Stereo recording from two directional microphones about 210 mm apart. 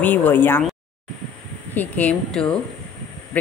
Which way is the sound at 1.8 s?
5° left (ahead or behind).